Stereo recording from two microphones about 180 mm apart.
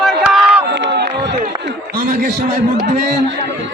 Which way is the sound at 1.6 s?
55° right (ahead or behind).